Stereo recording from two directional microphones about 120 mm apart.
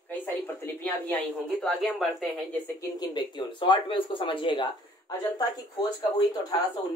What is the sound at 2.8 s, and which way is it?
Speech, 35° left (ahead or behind).